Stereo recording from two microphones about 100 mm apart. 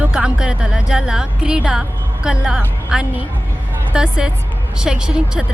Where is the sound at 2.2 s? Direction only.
5° right (ahead or behind).